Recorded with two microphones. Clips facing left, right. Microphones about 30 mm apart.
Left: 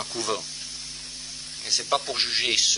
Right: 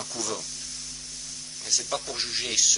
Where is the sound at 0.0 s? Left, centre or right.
Left.